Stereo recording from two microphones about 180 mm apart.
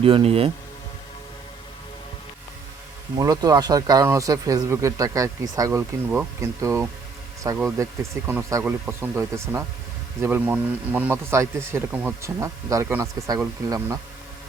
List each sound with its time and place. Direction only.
0.0 s speech: 30° right (ahead or behind)
3.2 s a man's voice: 20° right (ahead or behind)